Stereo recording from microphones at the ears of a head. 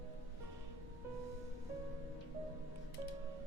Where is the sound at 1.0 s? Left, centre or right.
Right.